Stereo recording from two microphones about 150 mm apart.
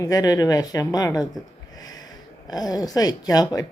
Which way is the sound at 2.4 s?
25° left (ahead or behind).